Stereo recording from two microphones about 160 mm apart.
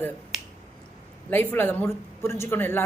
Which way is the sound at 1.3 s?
10° left (ahead or behind).